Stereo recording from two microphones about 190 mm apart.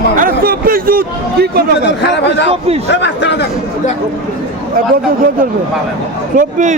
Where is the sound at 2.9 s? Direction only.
65° left (ahead or behind).